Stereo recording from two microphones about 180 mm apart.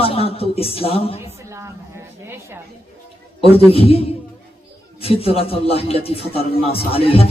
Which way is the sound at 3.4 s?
30° left (ahead or behind).